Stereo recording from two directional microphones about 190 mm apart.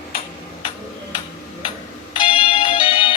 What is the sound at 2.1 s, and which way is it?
Music, 30° left (ahead or behind).